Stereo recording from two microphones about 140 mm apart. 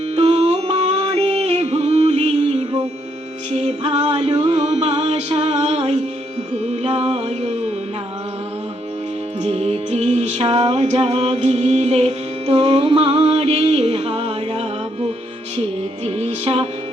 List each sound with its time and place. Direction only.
0.2 s music: 45° right (ahead or behind)
9.4 s music: 50° right (ahead or behind)
16.0 s music: 50° right (ahead or behind)